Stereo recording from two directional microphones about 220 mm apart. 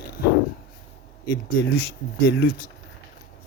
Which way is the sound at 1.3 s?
50° left (ahead or behind).